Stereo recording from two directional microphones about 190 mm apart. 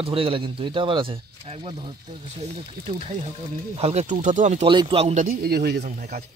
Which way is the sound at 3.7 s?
35° right (ahead or behind).